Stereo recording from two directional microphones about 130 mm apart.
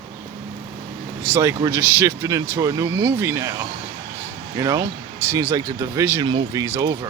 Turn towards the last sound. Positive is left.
turn(degrees=-25)  # may be behind; listen again after turning